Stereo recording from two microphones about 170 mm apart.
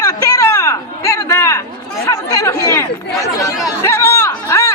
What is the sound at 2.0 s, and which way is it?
Chatter, 20° left (ahead or behind).